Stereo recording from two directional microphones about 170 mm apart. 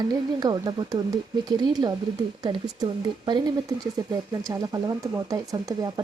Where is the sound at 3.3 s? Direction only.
25° right (ahead or behind).